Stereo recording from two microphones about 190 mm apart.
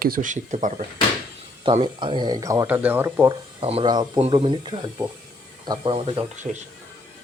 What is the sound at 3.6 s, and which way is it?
Speech, 30° right (ahead or behind).